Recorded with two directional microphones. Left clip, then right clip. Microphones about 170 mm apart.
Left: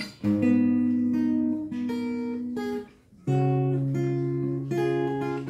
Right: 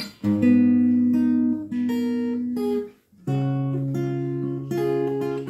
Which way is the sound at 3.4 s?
20° right (ahead or behind).